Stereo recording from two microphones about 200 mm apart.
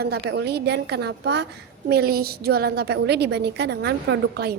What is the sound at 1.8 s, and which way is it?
A woman's voice, 55° right (ahead or behind).